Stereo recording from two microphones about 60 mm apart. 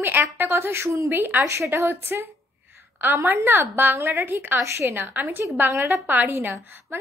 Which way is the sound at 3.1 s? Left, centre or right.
Right.